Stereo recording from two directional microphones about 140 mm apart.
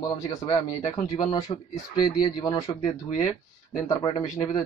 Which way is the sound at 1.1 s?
30° left (ahead or behind).